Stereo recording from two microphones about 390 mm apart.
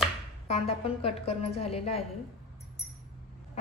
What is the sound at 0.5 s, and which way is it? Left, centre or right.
A woman's voice, centre.